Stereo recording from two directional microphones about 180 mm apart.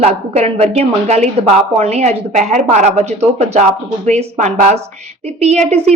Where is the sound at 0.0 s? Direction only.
35° right (ahead or behind).